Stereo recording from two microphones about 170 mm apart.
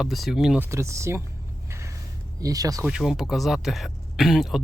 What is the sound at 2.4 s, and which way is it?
Speech, 20° right (ahead or behind).